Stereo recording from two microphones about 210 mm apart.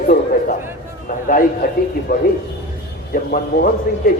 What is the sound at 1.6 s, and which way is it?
A man's voice, 45° left (ahead or behind).